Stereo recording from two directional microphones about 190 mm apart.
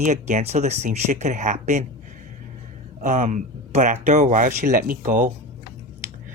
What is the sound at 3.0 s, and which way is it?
Speech, 40° right (ahead or behind).